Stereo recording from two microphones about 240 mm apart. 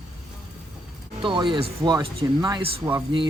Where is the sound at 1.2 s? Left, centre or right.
Centre.